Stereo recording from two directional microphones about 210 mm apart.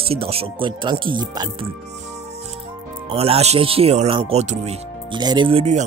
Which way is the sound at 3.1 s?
30° right (ahead or behind).